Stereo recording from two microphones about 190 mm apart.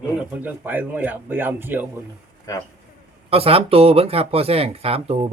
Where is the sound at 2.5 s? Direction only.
20° left (ahead or behind).